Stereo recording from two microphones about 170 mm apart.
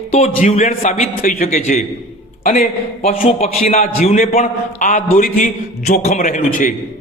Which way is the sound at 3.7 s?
40° left (ahead or behind).